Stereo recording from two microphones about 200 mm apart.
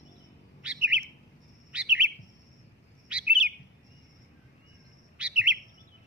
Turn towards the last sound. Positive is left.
turn(degrees=-5)  # may be behind; listen again after turning